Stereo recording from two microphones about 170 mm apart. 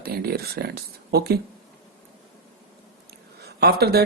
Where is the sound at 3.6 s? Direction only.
65° right (ahead or behind).